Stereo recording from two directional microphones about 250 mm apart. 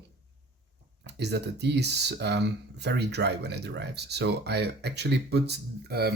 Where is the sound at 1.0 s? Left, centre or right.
Right.